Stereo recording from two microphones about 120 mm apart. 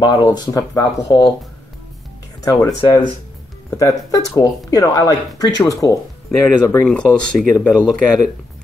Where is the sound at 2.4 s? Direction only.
30° left (ahead or behind).